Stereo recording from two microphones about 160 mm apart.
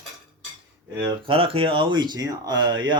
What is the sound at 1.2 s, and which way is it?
Speech, 35° right (ahead or behind).